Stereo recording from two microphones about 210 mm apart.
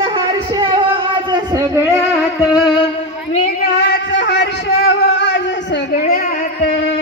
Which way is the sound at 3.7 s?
55° left (ahead or behind).